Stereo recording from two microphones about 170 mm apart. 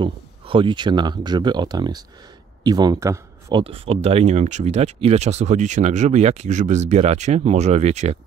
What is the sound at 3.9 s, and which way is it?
Speech, 35° right (ahead or behind).